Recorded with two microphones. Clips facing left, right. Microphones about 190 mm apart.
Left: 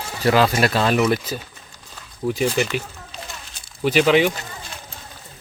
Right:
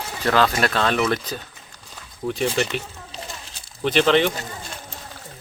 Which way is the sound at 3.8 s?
10° left (ahead or behind).